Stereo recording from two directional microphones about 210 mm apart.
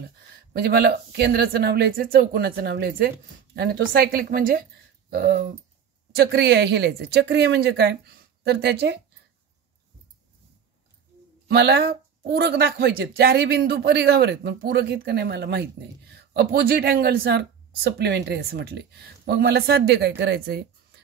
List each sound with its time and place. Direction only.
0.5 s speech: 50° right (ahead or behind)
11.4 s speech: 50° right (ahead or behind)